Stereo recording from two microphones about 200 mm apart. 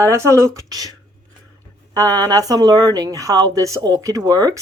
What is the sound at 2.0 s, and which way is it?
Speech, 20° right (ahead or behind).